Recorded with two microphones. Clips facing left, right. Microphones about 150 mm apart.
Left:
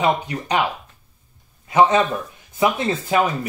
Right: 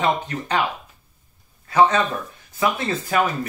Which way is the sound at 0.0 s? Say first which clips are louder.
Left 2 dB; 15° left (ahead or behind).